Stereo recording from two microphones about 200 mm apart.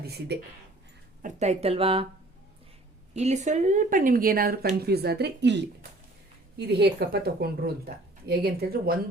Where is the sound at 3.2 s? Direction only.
35° right (ahead or behind); by 5.5 s 55° right (ahead or behind).